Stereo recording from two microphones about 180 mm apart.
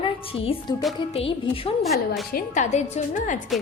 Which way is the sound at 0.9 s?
30° left (ahead or behind).